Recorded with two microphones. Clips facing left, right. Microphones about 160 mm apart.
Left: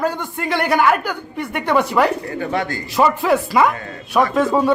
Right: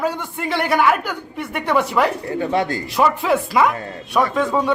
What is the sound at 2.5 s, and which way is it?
Speech, 30° right (ahead or behind).